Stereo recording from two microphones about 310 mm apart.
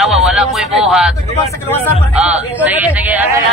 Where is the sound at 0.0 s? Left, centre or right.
Centre.